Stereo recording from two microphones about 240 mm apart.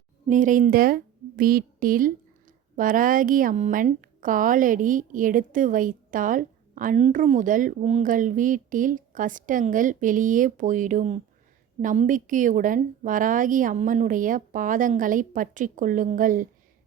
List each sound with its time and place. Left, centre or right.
0.3 s a woman's voice: right